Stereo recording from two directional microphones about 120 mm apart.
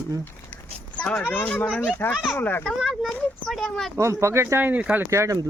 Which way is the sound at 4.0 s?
25° right (ahead or behind).